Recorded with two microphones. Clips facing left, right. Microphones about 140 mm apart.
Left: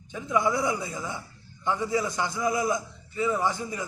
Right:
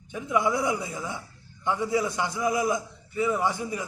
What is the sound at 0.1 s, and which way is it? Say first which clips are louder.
A man's voice: even; 10° right (ahead or behind).